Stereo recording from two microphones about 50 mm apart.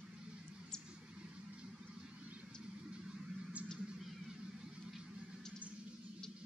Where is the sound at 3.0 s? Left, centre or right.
Centre.